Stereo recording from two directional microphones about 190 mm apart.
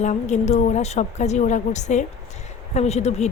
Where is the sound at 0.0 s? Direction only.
40° left (ahead or behind).